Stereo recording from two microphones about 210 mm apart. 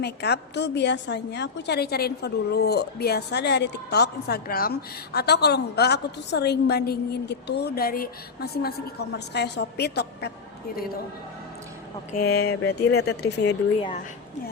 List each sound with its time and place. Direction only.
0.0 s a woman's voice: 50° left (ahead or behind)
12.3 s a woman's voice: 50° left (ahead or behind)